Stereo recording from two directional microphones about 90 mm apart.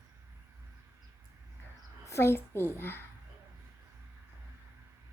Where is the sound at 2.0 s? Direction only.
30° left (ahead or behind).